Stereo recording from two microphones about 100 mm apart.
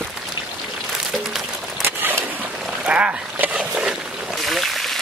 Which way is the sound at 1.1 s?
Centre (ahead or behind).